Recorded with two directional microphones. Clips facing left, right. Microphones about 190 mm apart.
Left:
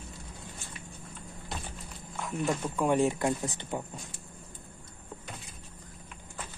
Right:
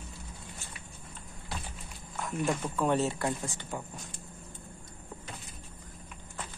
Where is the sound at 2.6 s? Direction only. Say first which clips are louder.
Left 4 dB; 10° left (ahead or behind).